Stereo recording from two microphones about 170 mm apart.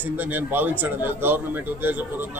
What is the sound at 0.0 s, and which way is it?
A man's voice, 10° right (ahead or behind).